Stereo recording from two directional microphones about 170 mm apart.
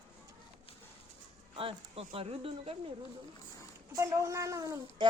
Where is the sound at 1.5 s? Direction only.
35° right (ahead or behind).